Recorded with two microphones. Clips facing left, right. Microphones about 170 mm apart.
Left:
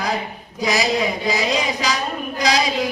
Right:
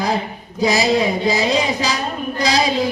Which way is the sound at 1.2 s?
30° right (ahead or behind).